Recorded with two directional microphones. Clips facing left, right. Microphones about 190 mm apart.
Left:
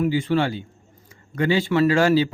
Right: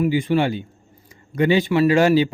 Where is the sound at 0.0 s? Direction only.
15° right (ahead or behind).